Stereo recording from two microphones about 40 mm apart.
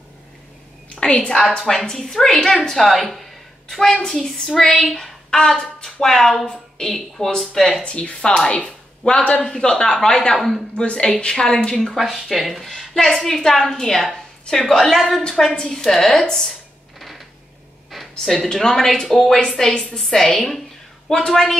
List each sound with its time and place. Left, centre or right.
0.9 s a woman's voice: left
1.9 s a woman's voice: centre
7.8 s a woman's voice: left
12.0 s a woman's voice: centre
16.3 s a woman's voice: centre
18.2 s a woman's voice: centre